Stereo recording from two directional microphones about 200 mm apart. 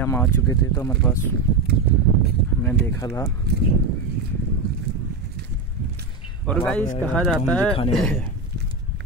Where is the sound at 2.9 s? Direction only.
15° left (ahead or behind).